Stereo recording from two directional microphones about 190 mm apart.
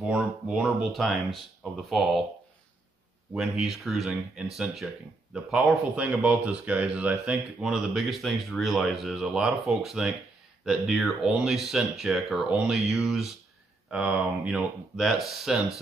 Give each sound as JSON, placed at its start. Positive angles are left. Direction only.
{"t": 0.0, "sound": "speech", "side_deg": -5}
{"t": 3.3, "sound": "speech", "side_deg": 0}